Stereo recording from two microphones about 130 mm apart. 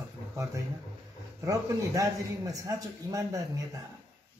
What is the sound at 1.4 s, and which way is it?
A man's voice, 25° right (ahead or behind).